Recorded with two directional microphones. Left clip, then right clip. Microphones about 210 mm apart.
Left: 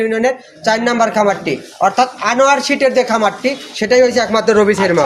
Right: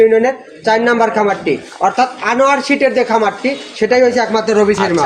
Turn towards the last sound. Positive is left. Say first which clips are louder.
# left 1 dB
turn(degrees=55)  # may be behind; listen again after turning